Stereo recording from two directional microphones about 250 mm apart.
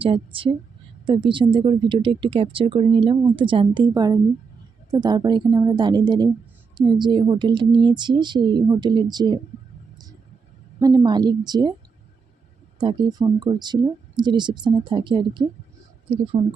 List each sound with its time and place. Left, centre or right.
0.0 s speech: right
10.8 s speech: centre
12.8 s speech: centre